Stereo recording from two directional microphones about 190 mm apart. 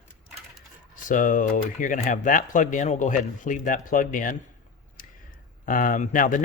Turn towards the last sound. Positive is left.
turn(degrees=45)  # may be behind; listen again after turning